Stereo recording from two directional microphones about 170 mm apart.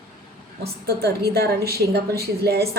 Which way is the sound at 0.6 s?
70° right (ahead or behind).